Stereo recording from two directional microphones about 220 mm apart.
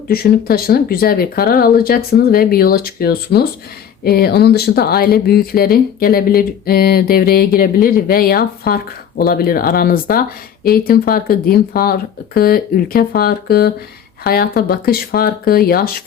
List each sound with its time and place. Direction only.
0.1 s speech: 40° left (ahead or behind)